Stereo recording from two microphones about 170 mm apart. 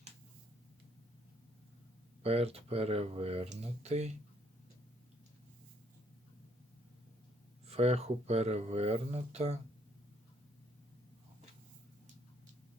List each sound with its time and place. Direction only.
2.2 s speech: 35° right (ahead or behind)
7.7 s speech: 35° right (ahead or behind)